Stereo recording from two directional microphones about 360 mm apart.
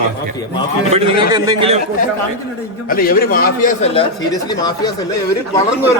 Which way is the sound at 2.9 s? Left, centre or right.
Left.